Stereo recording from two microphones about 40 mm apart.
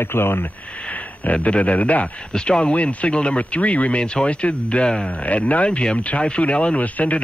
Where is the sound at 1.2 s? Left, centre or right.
Left.